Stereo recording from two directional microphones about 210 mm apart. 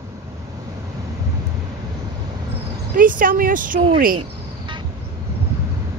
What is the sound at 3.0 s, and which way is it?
Speech, 40° right (ahead or behind).